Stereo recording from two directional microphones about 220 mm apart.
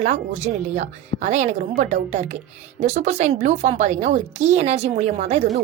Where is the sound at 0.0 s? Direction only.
30° right (ahead or behind).